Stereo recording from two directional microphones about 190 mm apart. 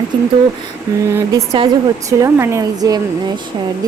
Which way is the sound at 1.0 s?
15° right (ahead or behind).